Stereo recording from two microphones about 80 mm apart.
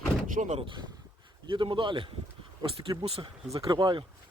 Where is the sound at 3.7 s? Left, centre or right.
Right.